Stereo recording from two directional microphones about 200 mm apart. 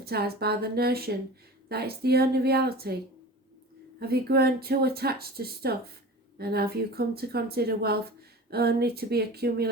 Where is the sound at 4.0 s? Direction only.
50° right (ahead or behind).